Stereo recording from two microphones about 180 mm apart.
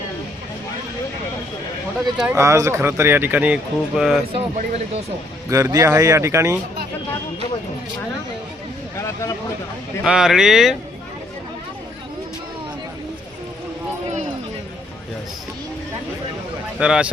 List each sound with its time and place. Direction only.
2.1 s speech: 10° right (ahead or behind)
4.3 s speech: 35° right (ahead or behind)
5.5 s speech: 15° right (ahead or behind)
9.0 s a sound: 15° left (ahead or behind)
10.0 s speech: 5° right (ahead or behind)
16.7 s speech: 5° right (ahead or behind)